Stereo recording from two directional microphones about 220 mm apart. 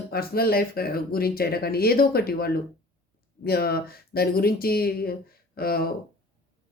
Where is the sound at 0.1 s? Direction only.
45° left (ahead or behind).